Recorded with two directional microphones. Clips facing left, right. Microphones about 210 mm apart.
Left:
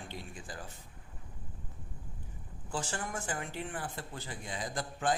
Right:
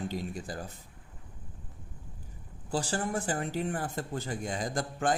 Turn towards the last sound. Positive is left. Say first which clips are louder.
# right 4 dB
turn(degrees=-45)  # may be behind; listen again after turning